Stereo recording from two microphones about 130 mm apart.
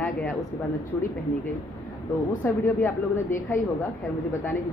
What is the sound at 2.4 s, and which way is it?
Speech, 15° left (ahead or behind).